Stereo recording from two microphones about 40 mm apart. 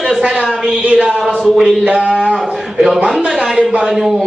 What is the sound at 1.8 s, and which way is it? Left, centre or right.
Speech, right.